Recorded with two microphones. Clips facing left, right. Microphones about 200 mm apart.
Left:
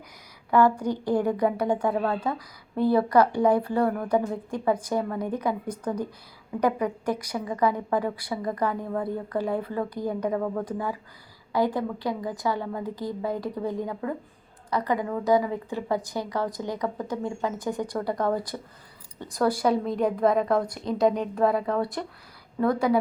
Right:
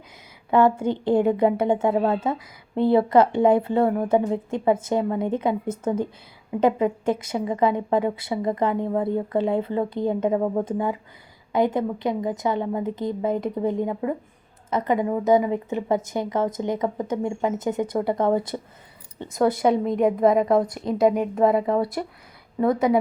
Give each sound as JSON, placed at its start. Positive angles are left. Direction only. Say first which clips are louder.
{"t": 0.5, "sound": "a woman's voice", "louder": "right 2 dB", "side_deg": -25}
{"t": 20.7, "sound": "speech", "louder": "right 3 dB", "side_deg": 0}
{"t": 21.3, "sound": "a woman's voice", "louder": "right 4 dB", "side_deg": -20}
{"t": 22.0, "sound": "a woman's voice", "louder": "right 4 dB", "side_deg": -10}